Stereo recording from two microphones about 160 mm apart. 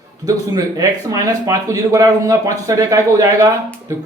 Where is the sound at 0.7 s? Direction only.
20° right (ahead or behind).